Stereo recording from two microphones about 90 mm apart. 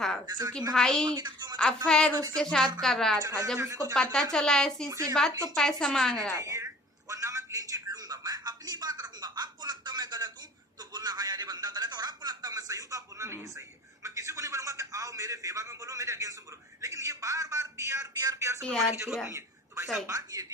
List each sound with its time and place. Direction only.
0.3 s a woman's voice: 50° right (ahead or behind)
0.7 s speech: 5° left (ahead or behind)
1.1 s a woman's voice: 55° right (ahead or behind)
1.5 s a woman's voice: 10° left (ahead or behind)
3.2 s a woman's voice: 45° right (ahead or behind)
3.9 s speech: 5° left (ahead or behind)
4.9 s a man's voice: 40° right (ahead or behind)
5.5 s a woman's voice: 5° left (ahead or behind)
6.3 s speech: 35° right (ahead or behind)
7.1 s a sound: 35° right (ahead or behind)
16.8 s a man's voice: 35° right (ahead or behind)
19.3 s a sound: 30° right (ahead or behind)
20.1 s a man's voice: 40° right (ahead or behind)